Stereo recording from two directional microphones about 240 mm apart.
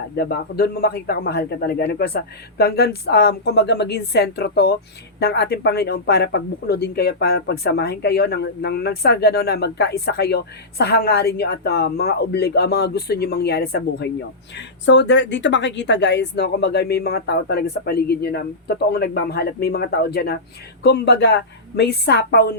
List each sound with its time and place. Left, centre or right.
0.2 s speech: left